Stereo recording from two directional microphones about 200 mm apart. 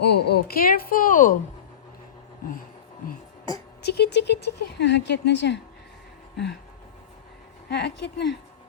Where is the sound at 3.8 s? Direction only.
55° left (ahead or behind).